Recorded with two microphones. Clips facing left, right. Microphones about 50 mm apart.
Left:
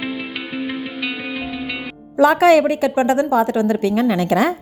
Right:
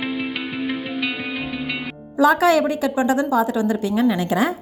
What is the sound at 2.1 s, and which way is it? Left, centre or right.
A woman's voice, left.